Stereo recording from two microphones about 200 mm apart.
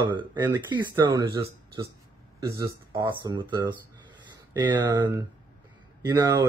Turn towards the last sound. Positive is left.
turn(degrees=-15)  # may be behind; listen again after turning